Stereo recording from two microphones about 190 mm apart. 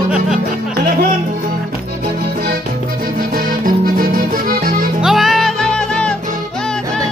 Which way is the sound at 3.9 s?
50° right (ahead or behind).